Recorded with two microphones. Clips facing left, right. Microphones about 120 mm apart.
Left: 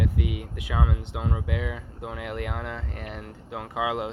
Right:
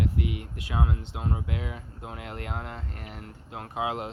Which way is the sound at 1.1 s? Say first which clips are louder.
Left 5 dB; 90° left.